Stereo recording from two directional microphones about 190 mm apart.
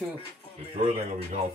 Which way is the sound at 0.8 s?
40° right (ahead or behind).